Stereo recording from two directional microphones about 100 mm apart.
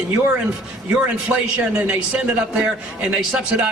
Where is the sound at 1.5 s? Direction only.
15° right (ahead or behind).